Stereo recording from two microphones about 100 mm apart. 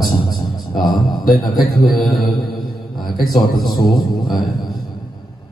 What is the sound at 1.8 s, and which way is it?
Speech, centre (ahead or behind).